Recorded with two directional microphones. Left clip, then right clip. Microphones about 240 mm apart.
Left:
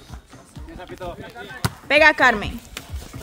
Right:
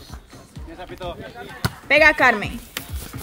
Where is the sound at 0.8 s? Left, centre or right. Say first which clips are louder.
Right 1 dB; centre.